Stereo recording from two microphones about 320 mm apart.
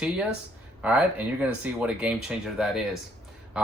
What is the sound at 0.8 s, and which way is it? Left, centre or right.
Speech, centre.